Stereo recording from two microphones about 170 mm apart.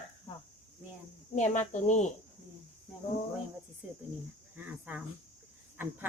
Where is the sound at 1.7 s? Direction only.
45° left (ahead or behind).